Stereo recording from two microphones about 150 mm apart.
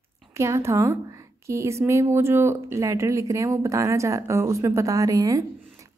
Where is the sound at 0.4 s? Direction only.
20° right (ahead or behind).